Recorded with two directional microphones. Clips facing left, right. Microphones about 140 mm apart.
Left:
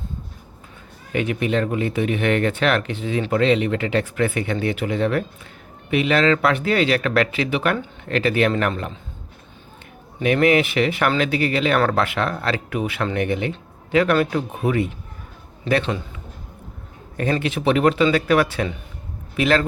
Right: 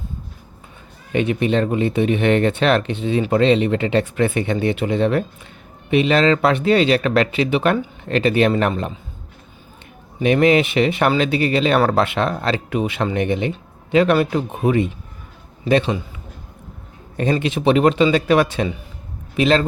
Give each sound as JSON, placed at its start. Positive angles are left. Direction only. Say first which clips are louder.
{"t": 1.1, "sound": "speech", "louder": "right 3 dB", "side_deg": -25}
{"t": 10.2, "sound": "speech", "louder": "right 2 dB", "side_deg": -20}
{"t": 17.2, "sound": "speech", "louder": "right 3 dB", "side_deg": -20}